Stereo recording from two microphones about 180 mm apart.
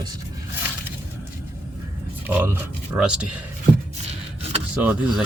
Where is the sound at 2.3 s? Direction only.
10° right (ahead or behind).